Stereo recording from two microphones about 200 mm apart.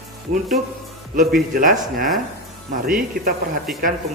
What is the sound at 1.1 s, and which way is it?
Speech, 45° right (ahead or behind).